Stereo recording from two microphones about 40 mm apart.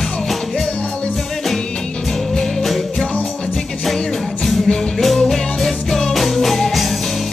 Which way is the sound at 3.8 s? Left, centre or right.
Centre.